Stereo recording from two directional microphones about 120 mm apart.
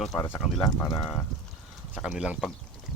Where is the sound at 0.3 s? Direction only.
Centre (ahead or behind).